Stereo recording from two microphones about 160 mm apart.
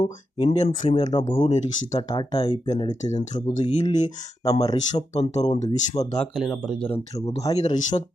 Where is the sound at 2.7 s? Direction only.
45° left (ahead or behind).